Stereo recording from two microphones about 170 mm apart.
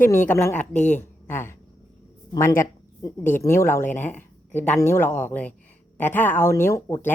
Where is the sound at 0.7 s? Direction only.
45° left (ahead or behind).